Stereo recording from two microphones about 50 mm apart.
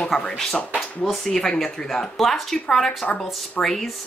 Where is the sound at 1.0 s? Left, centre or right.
Centre.